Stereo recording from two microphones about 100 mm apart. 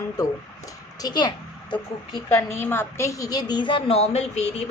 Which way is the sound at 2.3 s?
25° left (ahead or behind).